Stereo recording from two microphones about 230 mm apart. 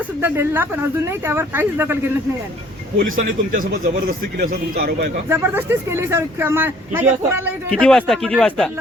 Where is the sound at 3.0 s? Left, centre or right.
Right.